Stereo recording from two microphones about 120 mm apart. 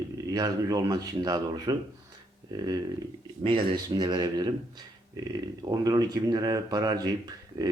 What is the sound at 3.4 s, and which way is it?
Speech, 45° right (ahead or behind).